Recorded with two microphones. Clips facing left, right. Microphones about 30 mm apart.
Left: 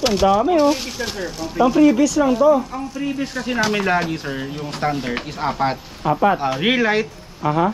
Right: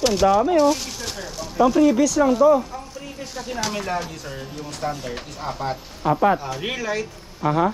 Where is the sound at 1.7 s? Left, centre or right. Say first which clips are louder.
Left 5 dB; left.